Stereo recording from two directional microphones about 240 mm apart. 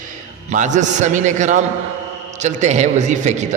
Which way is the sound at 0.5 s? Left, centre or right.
Right.